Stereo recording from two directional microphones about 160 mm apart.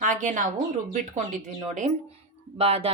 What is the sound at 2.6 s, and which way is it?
Speech, 40° right (ahead or behind).